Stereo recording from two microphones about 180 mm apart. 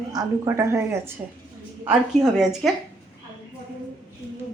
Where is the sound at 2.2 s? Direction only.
Centre (ahead or behind).